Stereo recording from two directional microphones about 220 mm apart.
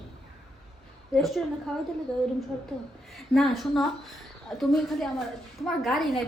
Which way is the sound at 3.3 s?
Centre (ahead or behind).